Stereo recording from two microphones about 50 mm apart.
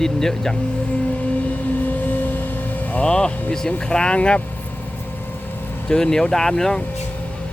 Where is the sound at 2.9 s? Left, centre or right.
Left.